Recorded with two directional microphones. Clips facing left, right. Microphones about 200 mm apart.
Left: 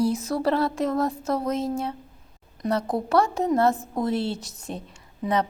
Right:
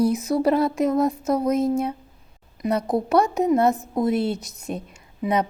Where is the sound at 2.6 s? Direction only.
15° right (ahead or behind).